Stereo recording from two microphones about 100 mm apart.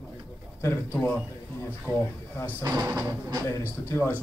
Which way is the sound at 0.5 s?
20° left (ahead or behind).